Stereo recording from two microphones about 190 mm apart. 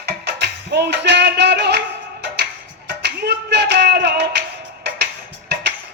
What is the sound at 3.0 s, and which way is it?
Clapping, 60° right (ahead or behind).